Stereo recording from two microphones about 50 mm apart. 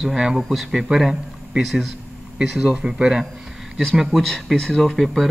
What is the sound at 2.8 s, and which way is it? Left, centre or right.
Speech, centre.